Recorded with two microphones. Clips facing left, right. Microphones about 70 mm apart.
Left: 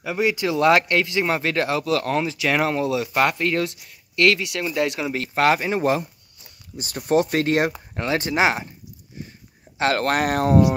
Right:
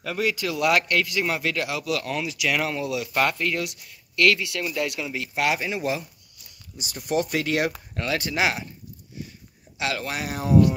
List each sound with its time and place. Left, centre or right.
0.0 s speech: centre
5.1 s speech: left
9.8 s speech: left